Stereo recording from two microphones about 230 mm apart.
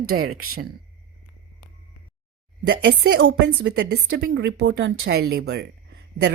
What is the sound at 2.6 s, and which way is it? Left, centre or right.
Speech, right.